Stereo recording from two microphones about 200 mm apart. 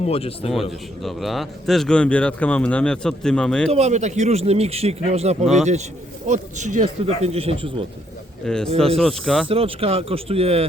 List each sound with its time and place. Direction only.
0.0 s speech: 30° left (ahead or behind)
0.5 s speech: centre (ahead or behind)
3.7 s a man's voice: 35° right (ahead or behind)
8.4 s speech: 5° left (ahead or behind)
9.5 s speech: 30° right (ahead or behind)